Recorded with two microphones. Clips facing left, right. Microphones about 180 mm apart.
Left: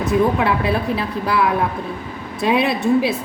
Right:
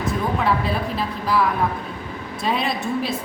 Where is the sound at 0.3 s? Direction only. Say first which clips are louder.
Left 3 dB; 65° left (ahead or behind).